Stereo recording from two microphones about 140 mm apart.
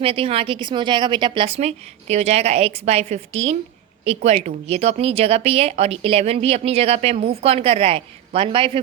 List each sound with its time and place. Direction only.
0.0 s speech: 40° right (ahead or behind)